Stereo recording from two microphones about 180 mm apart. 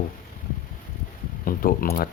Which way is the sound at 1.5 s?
50° left (ahead or behind).